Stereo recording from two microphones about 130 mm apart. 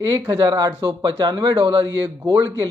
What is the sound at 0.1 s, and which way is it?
Speech, 30° right (ahead or behind).